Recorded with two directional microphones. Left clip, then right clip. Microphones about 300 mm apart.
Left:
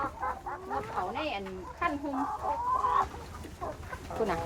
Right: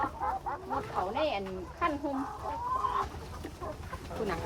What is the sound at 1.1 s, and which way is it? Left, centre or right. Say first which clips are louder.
Speech: right 3 dB; centre.